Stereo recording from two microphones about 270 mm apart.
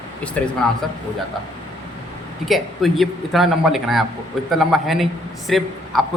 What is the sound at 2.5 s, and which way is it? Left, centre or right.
A man's voice, centre.